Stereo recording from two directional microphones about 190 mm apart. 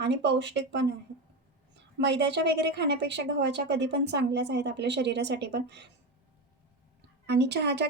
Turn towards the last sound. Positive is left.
turn(degrees=-60)  # may be behind; listen again after turning